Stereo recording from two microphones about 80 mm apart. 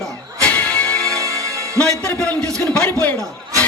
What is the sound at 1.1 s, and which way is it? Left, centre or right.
Music, right.